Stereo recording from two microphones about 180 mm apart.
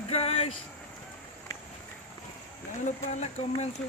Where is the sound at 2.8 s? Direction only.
40° left (ahead or behind).